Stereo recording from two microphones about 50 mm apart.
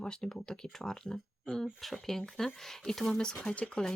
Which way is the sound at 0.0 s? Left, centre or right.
Centre.